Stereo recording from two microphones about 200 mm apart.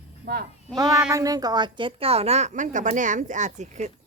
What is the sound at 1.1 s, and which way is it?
A woman's voice, 15° right (ahead or behind).